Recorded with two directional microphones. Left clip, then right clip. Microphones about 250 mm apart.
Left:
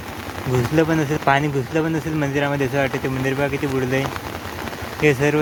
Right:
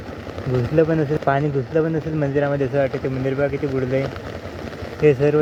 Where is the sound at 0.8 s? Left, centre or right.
Centre.